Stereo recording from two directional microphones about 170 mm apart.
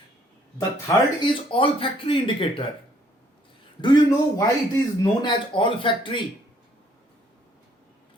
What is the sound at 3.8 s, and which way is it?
Speech, 25° left (ahead or behind).